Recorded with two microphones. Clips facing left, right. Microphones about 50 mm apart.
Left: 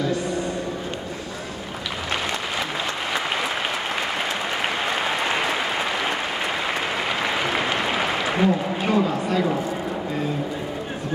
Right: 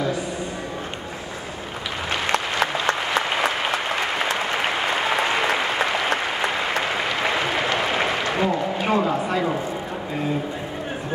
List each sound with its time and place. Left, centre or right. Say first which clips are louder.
2.3 s applause: right 4 dB; right
7.2 s applause: right 1 dB; centre
8.8 s a sound: even; centre